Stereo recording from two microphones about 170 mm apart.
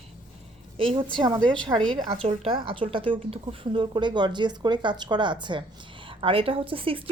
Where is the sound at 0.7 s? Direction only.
30° right (ahead or behind).